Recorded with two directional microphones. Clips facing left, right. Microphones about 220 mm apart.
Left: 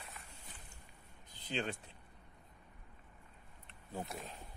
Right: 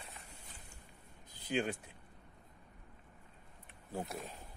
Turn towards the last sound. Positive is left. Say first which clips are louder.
# right 2 dB
turn(degrees=-10)  # may be behind; listen again after turning